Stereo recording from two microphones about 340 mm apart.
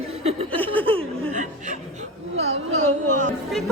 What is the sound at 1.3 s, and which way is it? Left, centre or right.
A woman's voice, right.